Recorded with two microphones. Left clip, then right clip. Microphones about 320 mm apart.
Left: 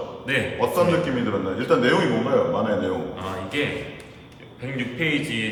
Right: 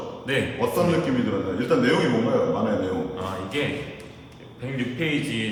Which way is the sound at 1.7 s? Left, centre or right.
Centre.